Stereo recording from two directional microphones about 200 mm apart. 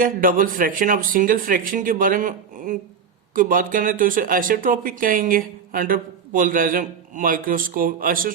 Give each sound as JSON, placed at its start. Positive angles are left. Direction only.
{"t": 0.0, "sound": "speech", "side_deg": -45}